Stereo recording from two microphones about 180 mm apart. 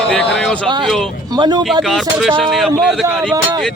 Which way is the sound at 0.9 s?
Centre (ahead or behind).